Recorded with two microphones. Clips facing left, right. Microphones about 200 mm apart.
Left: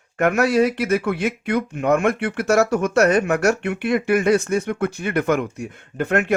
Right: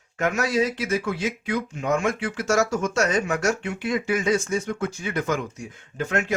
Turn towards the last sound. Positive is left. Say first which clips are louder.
# left 6 dB
turn(degrees=60)  # may be behind; listen again after turning